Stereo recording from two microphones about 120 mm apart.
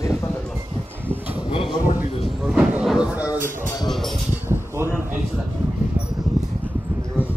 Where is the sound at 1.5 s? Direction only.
45° left (ahead or behind).